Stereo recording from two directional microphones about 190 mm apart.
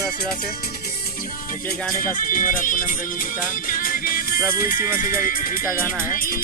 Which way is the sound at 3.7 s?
50° left (ahead or behind).